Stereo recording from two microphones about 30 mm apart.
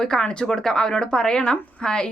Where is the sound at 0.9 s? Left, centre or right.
Left.